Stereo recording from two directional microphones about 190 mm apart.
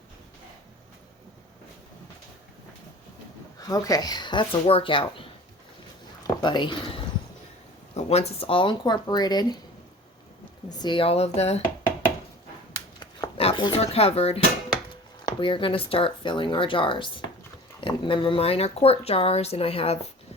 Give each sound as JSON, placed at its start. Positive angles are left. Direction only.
{"t": 3.6, "sound": "speech", "side_deg": 20}
{"t": 6.2, "sound": "speech", "side_deg": 25}
{"t": 7.9, "sound": "speech", "side_deg": 35}
{"t": 10.7, "sound": "speech", "side_deg": 20}
{"t": 13.3, "sound": "speech", "side_deg": 30}